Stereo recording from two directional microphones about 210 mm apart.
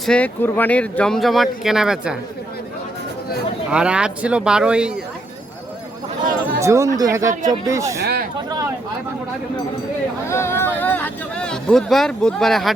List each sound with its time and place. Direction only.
0.0 s speech: 5° left (ahead or behind)
3.7 s speech: 5° right (ahead or behind)
6.6 s speech: 15° right (ahead or behind)
10.2 s speech: 10° left (ahead or behind)